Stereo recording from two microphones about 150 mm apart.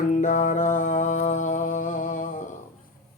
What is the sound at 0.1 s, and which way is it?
Music, 55° left (ahead or behind).